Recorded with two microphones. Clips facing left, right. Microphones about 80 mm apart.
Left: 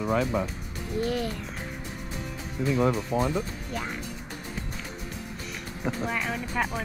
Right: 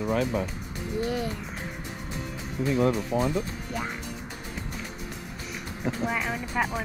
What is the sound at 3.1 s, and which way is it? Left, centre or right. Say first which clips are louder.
Speech: even; left.